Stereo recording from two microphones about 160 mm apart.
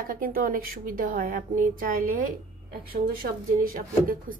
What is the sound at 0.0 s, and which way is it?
A woman's voice, 65° right (ahead or behind).